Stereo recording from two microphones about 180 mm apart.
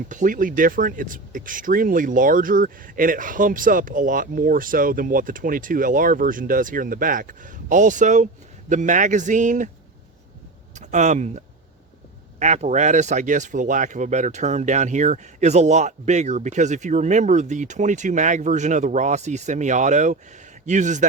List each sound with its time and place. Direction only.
0.1 s speech: 45° right (ahead or behind)
10.8 s speech: 40° right (ahead or behind)